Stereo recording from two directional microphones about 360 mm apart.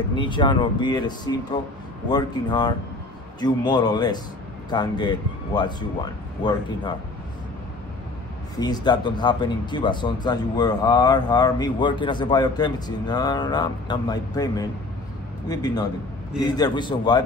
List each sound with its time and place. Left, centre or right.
0.1 s speech: centre
8.5 s speech: centre